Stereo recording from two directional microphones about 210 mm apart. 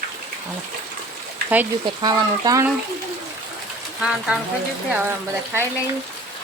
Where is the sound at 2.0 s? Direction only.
20° right (ahead or behind).